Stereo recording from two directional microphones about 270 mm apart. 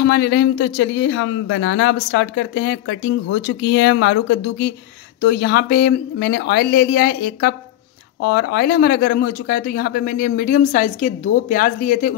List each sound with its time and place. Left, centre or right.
0.0 s speech: left